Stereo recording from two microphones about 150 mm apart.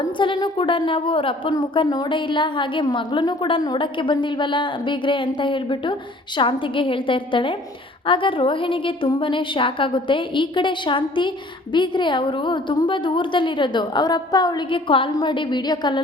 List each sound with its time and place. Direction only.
0.0 s a woman's voice: 30° left (ahead or behind)